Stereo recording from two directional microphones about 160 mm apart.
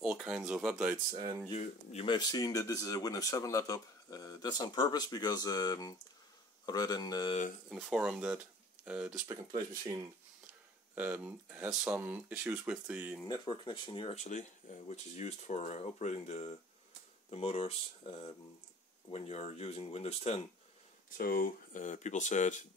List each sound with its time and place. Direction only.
0.0 s speech: 5° right (ahead or behind)
1.5 s speech: 40° left (ahead or behind)
2.0 s speech: 25° left (ahead or behind)
7.7 s speech: centre (ahead or behind)
11.0 s speech: 10° right (ahead or behind)
13.3 s speech: 30° left (ahead or behind)
14.1 s speech: 50° left (ahead or behind)
21.2 s speech: 65° left (ahead or behind)